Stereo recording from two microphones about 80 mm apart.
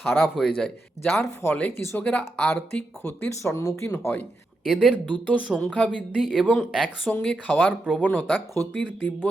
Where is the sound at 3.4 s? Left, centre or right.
Left.